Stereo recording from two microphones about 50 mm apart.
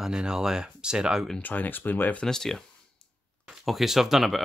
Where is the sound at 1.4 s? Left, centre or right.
Left.